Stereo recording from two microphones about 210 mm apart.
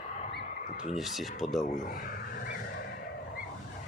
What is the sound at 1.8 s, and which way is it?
Speech, 40° left (ahead or behind).